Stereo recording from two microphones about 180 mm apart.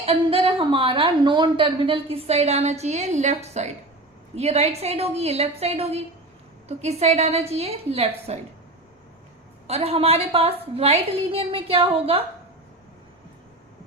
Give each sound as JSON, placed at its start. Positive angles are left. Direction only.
{"t": 0.0, "sound": "a woman's voice", "side_deg": -30}
{"t": 9.6, "sound": "a woman's voice", "side_deg": -35}